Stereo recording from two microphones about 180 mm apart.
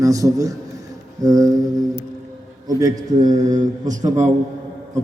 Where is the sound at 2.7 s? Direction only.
20° right (ahead or behind).